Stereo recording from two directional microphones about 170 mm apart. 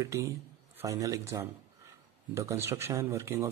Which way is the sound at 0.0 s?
20° right (ahead or behind).